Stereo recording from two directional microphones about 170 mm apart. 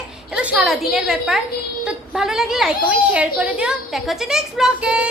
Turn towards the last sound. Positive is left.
turn(degrees=-5)  # may be behind; listen again after turning